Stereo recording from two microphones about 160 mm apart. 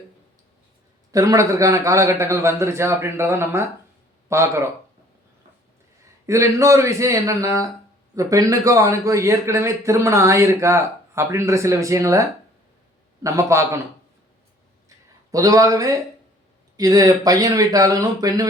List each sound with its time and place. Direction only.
1.1 s a man's voice: 20° right (ahead or behind)
6.2 s a man's voice: 20° right (ahead or behind)
13.2 s a man's voice: 20° right (ahead or behind)
14.8 s a sound: 20° right (ahead or behind)
16.7 s a man's voice: 25° right (ahead or behind)